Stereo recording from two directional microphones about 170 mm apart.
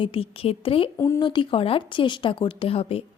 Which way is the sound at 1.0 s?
20° left (ahead or behind).